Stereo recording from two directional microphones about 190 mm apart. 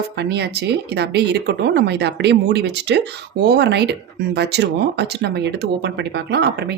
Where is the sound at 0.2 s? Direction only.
60° right (ahead or behind).